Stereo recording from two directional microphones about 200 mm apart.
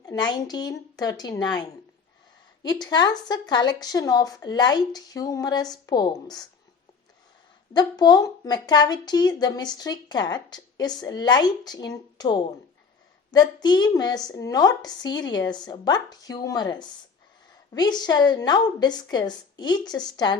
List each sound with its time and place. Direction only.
0.0 s a woman's voice: 20° left (ahead or behind)
2.6 s a woman's voice: 20° left (ahead or behind)
7.7 s a woman's voice: 20° left (ahead or behind)